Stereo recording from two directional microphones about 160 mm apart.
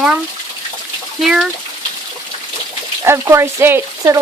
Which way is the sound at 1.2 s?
Centre (ahead or behind).